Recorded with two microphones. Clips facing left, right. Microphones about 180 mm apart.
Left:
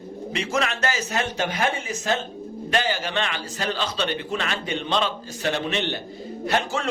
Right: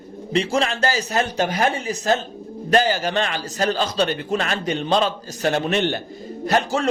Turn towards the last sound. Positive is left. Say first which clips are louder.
# right 4 dB
turn(degrees=-40)  # may be behind; listen again after turning